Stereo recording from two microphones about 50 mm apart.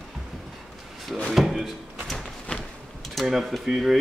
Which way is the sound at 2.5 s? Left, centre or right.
Left.